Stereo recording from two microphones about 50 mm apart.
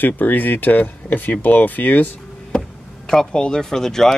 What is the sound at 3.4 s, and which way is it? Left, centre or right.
Speech, centre.